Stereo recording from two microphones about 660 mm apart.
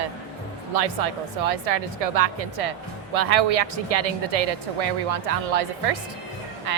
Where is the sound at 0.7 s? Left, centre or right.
Right.